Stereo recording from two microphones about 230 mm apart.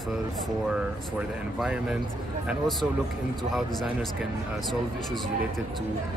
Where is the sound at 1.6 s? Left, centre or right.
Centre.